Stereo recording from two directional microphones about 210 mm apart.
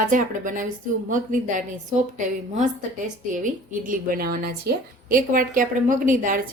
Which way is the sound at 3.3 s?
40° right (ahead or behind).